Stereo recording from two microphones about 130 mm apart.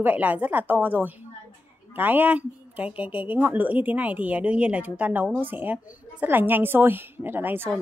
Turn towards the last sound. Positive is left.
turn(degrees=-15)  # may be behind; listen again after turning